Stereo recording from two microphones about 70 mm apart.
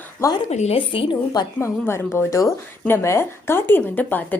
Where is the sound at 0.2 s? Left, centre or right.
Left.